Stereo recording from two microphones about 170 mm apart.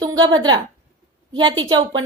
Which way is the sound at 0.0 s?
25° right (ahead or behind).